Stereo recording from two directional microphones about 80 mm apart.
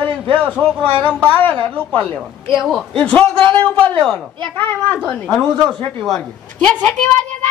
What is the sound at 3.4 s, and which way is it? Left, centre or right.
Speech, right.